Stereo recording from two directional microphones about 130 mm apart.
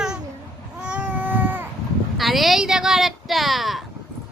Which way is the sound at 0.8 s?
10° right (ahead or behind).